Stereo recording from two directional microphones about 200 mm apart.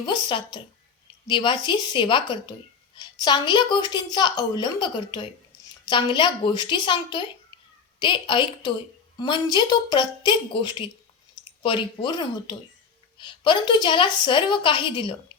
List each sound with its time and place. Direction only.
0.0 s speech: 25° left (ahead or behind)